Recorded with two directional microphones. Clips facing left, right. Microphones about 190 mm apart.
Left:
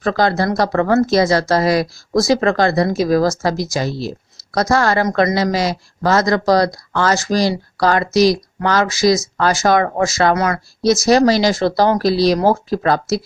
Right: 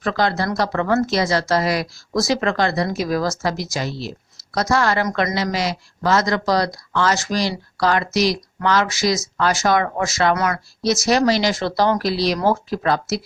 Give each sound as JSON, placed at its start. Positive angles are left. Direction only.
{"t": 0.0, "sound": "speech", "side_deg": 40}